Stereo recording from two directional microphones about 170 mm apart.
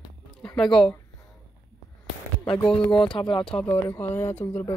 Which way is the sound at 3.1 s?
30° left (ahead or behind).